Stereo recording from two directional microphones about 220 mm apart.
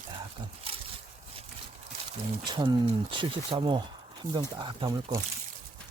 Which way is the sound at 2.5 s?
20° right (ahead or behind).